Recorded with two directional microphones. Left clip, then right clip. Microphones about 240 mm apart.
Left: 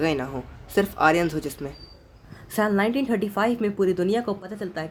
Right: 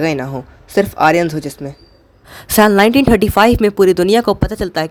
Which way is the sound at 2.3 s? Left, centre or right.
Right.